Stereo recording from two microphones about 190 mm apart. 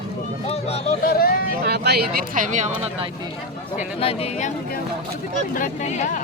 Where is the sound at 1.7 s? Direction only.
60° right (ahead or behind); by 2.8 s 40° right (ahead or behind).